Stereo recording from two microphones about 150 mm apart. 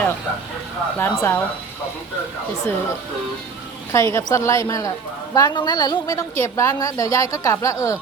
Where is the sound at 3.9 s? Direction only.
20° left (ahead or behind).